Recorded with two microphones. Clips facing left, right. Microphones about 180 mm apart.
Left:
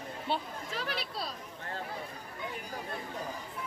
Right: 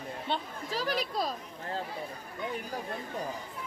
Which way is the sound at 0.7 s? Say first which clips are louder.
Right 7 dB; 40° right (ahead or behind).